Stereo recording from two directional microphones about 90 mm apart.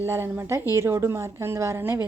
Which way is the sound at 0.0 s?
25° right (ahead or behind).